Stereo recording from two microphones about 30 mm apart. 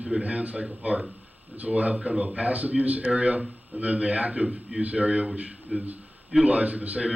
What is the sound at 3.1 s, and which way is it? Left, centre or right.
A man's voice, right.